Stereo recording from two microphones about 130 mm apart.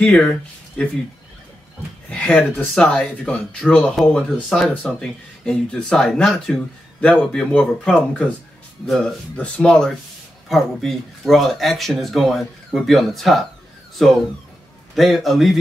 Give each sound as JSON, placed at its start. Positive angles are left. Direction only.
{"t": 0.0, "sound": "speech", "side_deg": 10}
{"t": 2.0, "sound": "speech", "side_deg": 10}